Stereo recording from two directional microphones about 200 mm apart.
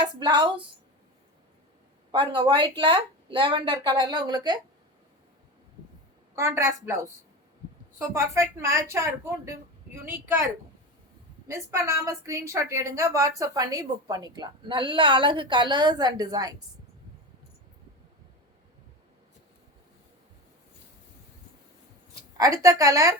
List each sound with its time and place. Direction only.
0.0 s a woman's voice: 25° right (ahead or behind)
2.1 s a woman's voice: 25° right (ahead or behind)
6.3 s a woman's voice: 15° right (ahead or behind)
22.4 s a woman's voice: 15° right (ahead or behind)